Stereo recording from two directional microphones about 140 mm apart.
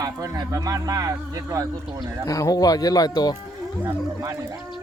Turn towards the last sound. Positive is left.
turn(degrees=30)  # may be behind; listen again after turning